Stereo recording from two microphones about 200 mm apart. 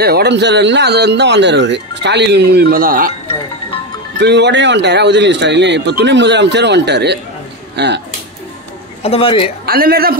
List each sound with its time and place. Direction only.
0.0 s speech: 55° right (ahead or behind)
4.2 s speech: 60° right (ahead or behind)
9.0 s a man's voice: 30° left (ahead or behind)
9.7 s a man's voice: 50° right (ahead or behind)